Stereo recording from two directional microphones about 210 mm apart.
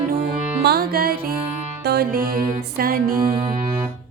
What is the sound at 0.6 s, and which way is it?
Music, 50° right (ahead or behind).